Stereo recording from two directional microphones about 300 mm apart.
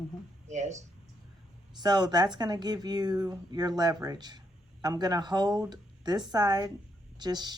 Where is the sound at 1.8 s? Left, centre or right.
Centre.